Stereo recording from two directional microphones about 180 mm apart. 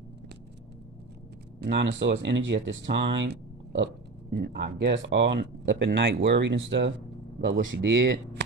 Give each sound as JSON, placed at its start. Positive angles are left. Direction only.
{"t": 1.6, "sound": "speech", "side_deg": -75}
{"t": 7.4, "sound": "speech", "side_deg": -75}